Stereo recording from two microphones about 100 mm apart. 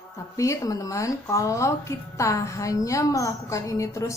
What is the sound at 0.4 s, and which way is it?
A woman's voice, 35° left (ahead or behind).